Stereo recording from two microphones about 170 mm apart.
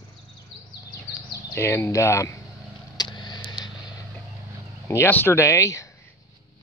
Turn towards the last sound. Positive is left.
turn(degrees=20)  # may be behind; listen again after turning